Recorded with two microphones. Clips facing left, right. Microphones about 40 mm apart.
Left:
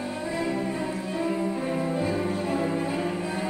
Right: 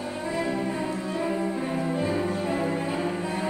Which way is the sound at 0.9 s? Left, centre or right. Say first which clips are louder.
Right 1 dB; centre.